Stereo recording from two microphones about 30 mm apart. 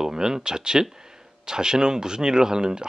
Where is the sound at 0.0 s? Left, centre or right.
Right.